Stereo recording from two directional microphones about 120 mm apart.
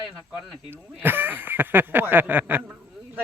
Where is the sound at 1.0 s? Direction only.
15° right (ahead or behind).